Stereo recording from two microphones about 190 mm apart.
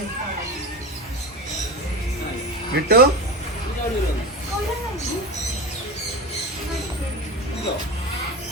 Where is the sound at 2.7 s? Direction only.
55° right (ahead or behind).